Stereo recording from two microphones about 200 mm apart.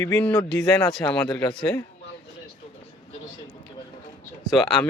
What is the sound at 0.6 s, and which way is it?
Speech, 15° left (ahead or behind).